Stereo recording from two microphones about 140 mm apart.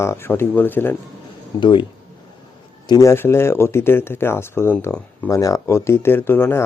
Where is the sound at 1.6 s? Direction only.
35° left (ahead or behind).